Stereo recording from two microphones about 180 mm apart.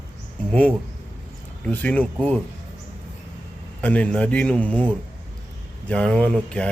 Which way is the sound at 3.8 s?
10° left (ahead or behind).